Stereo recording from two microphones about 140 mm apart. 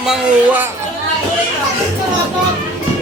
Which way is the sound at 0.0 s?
5° right (ahead or behind).